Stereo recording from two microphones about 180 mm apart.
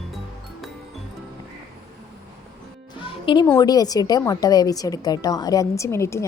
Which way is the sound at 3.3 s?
30° left (ahead or behind).